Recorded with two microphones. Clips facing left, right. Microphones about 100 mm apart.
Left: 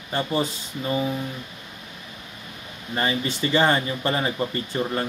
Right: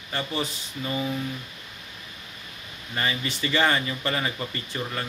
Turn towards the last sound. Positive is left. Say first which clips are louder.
# left 6 dB
turn(degrees=30)  # may be behind; listen again after turning